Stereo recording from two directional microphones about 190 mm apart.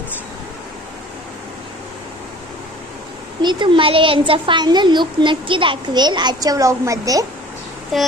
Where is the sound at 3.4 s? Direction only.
25° right (ahead or behind).